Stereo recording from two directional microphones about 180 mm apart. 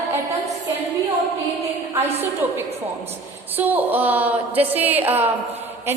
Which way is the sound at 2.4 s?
10° right (ahead or behind).